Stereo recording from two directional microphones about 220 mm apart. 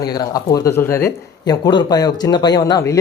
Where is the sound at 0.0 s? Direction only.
15° left (ahead or behind).